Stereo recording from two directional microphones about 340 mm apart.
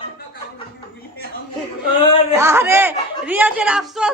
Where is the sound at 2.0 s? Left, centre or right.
Centre.